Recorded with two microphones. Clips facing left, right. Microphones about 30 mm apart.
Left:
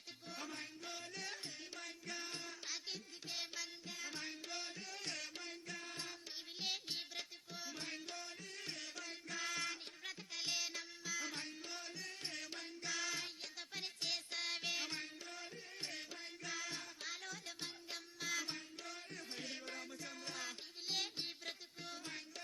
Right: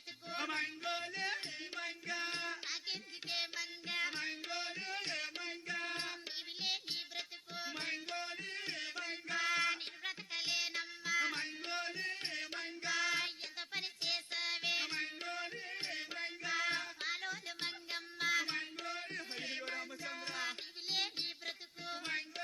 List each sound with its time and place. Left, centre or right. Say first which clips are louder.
0.3 s music: right 11 dB; right
0.9 s music: right 6 dB; right
5.8 s music: right 8 dB; right
6.6 s music: right 3 dB; right
7.5 s music: right 6 dB; right
15.0 s music: right 8 dB; right